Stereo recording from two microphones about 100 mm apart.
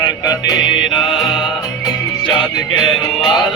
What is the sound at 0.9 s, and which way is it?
Music, 50° left (ahead or behind).